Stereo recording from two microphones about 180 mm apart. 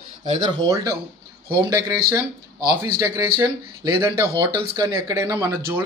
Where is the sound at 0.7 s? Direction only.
20° right (ahead or behind).